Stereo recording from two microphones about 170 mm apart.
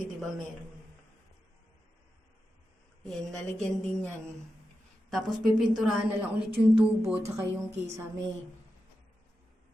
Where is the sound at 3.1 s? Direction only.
Centre (ahead or behind).